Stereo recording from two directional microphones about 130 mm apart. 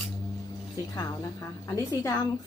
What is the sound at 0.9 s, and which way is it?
Speech, 25° left (ahead or behind).